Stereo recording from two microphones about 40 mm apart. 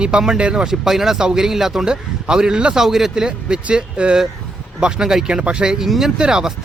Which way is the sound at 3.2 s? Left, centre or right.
Right.